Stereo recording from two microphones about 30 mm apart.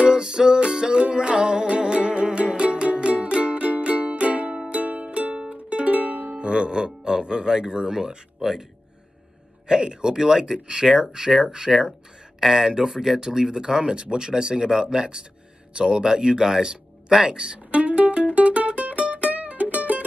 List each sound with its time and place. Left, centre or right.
0.2 s music: centre; by 5.0 s right
5.0 s music: right
5.9 s music: right
6.3 s music: right
7.9 s speech: right
8.4 s speech: centre
9.7 s speech: right
17.6 s music: right